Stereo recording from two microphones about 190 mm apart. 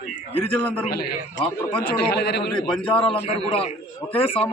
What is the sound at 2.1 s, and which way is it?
Speech, 60° left (ahead or behind).